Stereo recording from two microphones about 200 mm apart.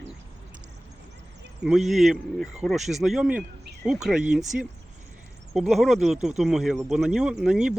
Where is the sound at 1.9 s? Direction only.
Centre (ahead or behind).